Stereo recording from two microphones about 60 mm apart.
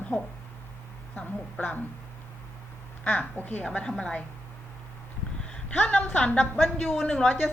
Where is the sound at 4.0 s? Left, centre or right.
Centre.